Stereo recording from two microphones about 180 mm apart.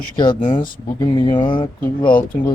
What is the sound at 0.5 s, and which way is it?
Speech, 25° left (ahead or behind).